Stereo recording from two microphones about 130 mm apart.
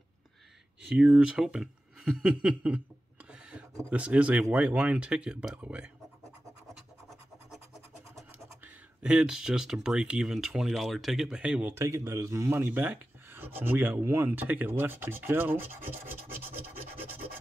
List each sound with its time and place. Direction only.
0.8 s speech: 5° right (ahead or behind)
3.9 s speech: 10° right (ahead or behind)
9.0 s speech: 5° right (ahead or behind)
11.7 s speech: 20° right (ahead or behind)